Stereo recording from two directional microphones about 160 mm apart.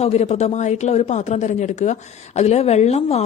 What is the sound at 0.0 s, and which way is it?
Speech, 40° left (ahead or behind).